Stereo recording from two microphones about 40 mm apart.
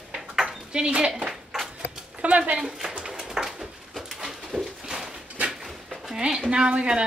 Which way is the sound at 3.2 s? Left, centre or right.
Centre.